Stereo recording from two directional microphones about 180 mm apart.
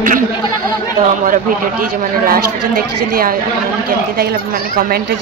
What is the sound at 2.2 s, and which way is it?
A woman's voice, 55° right (ahead or behind).